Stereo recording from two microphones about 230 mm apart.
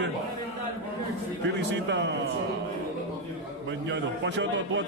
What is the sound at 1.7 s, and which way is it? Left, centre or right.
Speech, right.